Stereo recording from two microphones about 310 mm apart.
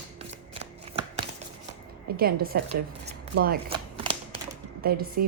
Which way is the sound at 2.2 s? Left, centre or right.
Right.